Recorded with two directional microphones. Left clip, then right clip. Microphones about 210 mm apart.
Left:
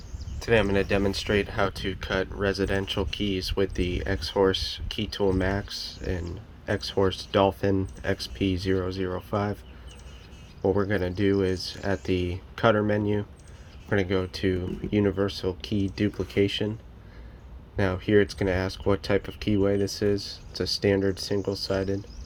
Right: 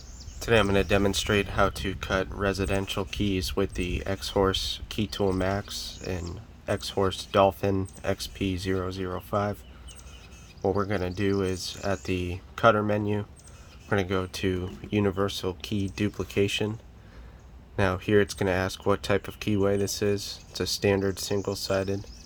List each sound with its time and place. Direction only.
0.4 s speech: 15° right (ahead or behind)
10.6 s speech: 10° right (ahead or behind)
17.7 s speech: 20° right (ahead or behind)